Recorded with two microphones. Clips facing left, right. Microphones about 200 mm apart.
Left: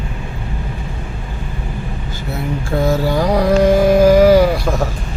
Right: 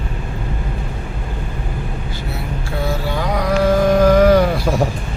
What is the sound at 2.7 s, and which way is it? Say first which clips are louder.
Mantra: left 6 dB; 45° left (ahead or behind).